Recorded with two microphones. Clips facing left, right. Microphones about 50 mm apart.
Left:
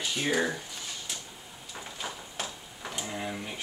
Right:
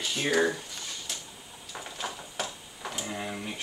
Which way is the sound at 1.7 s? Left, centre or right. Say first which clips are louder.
Right 2 dB; centre.